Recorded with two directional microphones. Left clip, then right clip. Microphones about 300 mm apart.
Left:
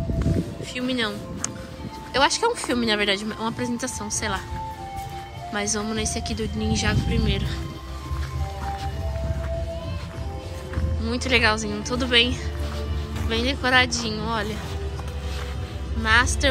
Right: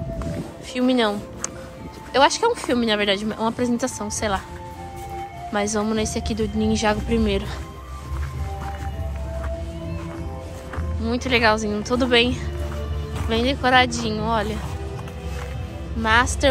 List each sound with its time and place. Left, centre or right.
0.7 s a woman's voice: centre
5.5 s speech: centre
11.1 s speech: centre
16.0 s speech: centre